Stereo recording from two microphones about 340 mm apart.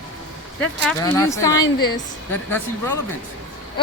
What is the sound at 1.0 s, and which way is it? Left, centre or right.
Speech, centre.